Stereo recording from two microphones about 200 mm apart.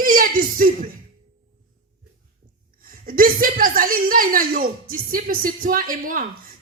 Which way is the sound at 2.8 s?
45° right (ahead or behind).